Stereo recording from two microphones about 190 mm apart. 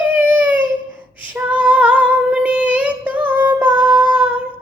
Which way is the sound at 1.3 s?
10° right (ahead or behind).